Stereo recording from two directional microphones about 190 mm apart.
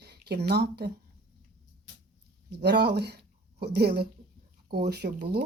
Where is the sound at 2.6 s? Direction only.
60° right (ahead or behind).